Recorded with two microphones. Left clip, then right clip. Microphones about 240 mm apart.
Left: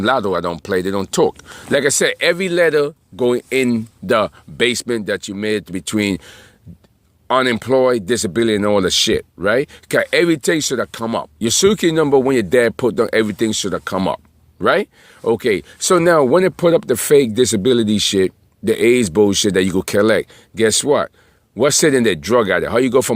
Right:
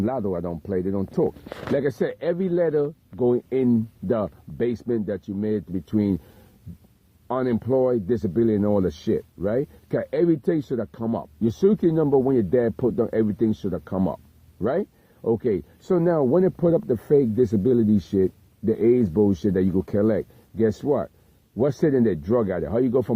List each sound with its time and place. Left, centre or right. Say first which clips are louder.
0.0 s speech: left 10 dB; left
7.3 s speech: left 8 dB; left